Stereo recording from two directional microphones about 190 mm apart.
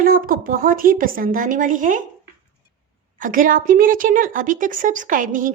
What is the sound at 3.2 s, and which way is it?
A woman's voice, 45° right (ahead or behind).